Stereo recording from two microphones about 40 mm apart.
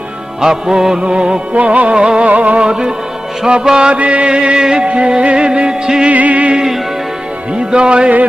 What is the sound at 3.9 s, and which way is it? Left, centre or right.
Music, right.